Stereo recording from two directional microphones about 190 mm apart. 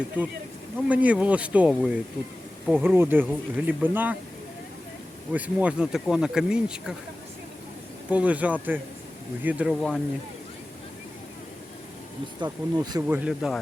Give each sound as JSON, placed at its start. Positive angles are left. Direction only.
{"t": 0.2, "sound": "speech", "side_deg": -10}
{"t": 5.3, "sound": "speech", "side_deg": -5}
{"t": 8.1, "sound": "speech", "side_deg": -5}
{"t": 12.4, "sound": "speech", "side_deg": -20}
{"t": 13.1, "sound": "speech", "side_deg": -5}